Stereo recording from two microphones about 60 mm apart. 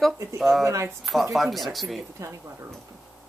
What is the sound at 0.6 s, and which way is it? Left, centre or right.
Speech, right.